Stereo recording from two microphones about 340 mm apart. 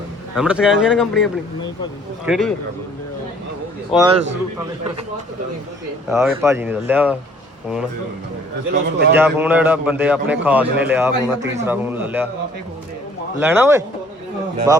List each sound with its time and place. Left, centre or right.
0.3 s a man's voice: centre
3.9 s a man's voice: centre
6.1 s a man's voice: centre
8.7 s a man's voice: right
9.1 s a man's voice: centre
13.4 s speech: centre